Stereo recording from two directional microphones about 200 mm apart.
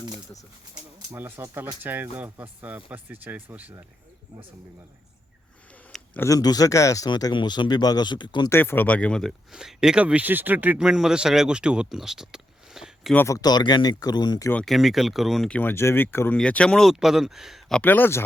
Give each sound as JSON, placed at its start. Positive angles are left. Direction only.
{"t": 1.1, "sound": "speech", "side_deg": -10}
{"t": 5.7, "sound": "speech", "side_deg": 10}
{"t": 8.5, "sound": "speech", "side_deg": 10}
{"t": 13.1, "sound": "speech", "side_deg": 15}
{"t": 14.6, "sound": "speech", "side_deg": 0}